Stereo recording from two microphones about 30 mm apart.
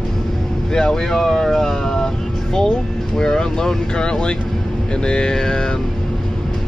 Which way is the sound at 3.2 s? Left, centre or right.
Left.